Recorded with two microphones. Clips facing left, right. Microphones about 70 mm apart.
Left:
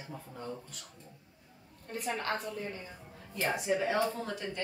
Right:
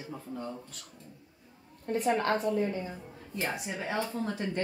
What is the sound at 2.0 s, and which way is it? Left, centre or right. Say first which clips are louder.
Speech: right 7 dB; right.